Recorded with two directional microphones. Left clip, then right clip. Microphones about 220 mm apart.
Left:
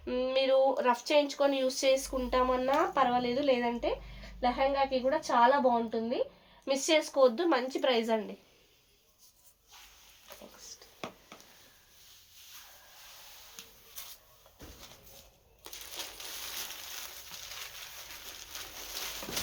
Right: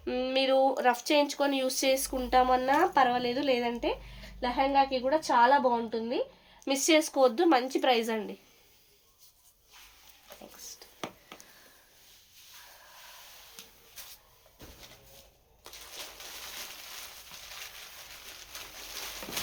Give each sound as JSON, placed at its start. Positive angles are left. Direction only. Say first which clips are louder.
{"t": 0.0, "sound": "speech", "louder": "right 1 dB", "side_deg": -50}